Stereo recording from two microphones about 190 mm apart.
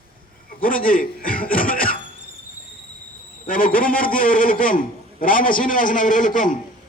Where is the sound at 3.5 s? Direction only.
50° left (ahead or behind).